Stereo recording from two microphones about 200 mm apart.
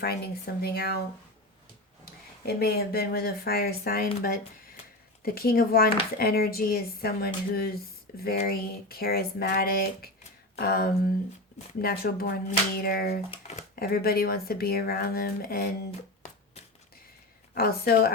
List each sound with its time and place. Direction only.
0.0 s speech: 55° left (ahead or behind)
2.0 s speech: 50° left (ahead or behind)
5.2 s speech: 50° left (ahead or behind)
13.3 s speech: 35° left (ahead or behind)
13.7 s speech: 50° left (ahead or behind)
17.5 s speech: 50° left (ahead or behind)